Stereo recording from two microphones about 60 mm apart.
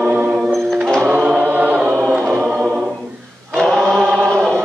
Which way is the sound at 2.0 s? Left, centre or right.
Centre.